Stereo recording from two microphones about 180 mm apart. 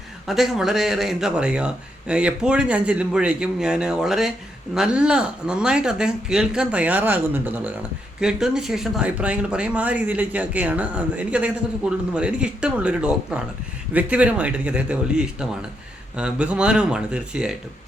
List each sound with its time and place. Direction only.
0.3 s speech: centre (ahead or behind)